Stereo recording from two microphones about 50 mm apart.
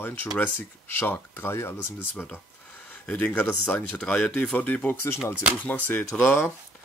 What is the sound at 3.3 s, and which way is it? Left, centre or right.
Speech, left.